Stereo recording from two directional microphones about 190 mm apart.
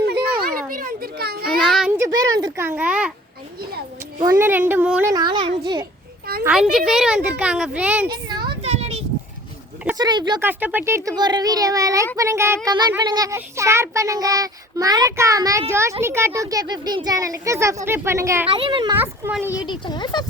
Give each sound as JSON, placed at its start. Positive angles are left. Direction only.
{"t": 0.7, "sound": "children playing", "side_deg": -50}
{"t": 1.6, "sound": "a sound", "side_deg": 0}
{"t": 2.0, "sound": "speech", "side_deg": -20}
{"t": 4.3, "sound": "a child's voice", "side_deg": -10}
{"t": 5.1, "sound": "a child's voice", "side_deg": -25}
{"t": 6.4, "sound": "a woman's voice", "side_deg": -5}
{"t": 8.6, "sound": "a sound", "side_deg": -35}
{"t": 10.0, "sound": "a child's voice", "side_deg": -25}
{"t": 10.4, "sound": "a child's voice", "side_deg": -10}
{"t": 18.5, "sound": "a child's voice", "side_deg": -25}
{"t": 18.9, "sound": "a child's voice", "side_deg": -10}
{"t": 19.5, "sound": "speech", "side_deg": 20}